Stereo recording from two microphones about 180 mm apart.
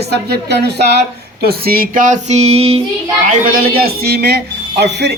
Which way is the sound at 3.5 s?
55° right (ahead or behind).